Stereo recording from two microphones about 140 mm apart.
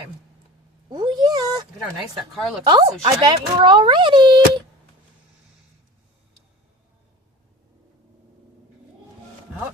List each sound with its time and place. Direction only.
0.9 s a sound: 30° right (ahead or behind)
2.1 s a woman's voice: centre (ahead or behind)
2.6 s speech: 35° right (ahead or behind)